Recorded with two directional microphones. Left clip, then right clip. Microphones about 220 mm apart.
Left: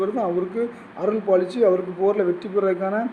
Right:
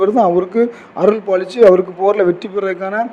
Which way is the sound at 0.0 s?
35° right (ahead or behind).